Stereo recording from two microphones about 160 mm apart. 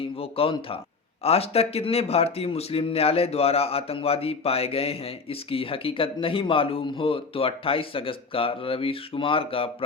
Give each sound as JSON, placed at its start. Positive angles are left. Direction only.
{"t": 0.0, "sound": "speech", "side_deg": 35}